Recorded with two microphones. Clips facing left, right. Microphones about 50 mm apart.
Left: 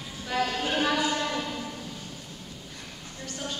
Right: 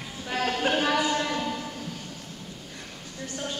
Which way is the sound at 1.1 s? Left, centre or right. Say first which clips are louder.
Right 2 dB; centre.